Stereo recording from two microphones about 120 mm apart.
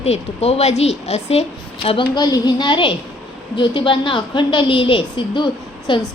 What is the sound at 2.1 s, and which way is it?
A woman's voice, 35° left (ahead or behind).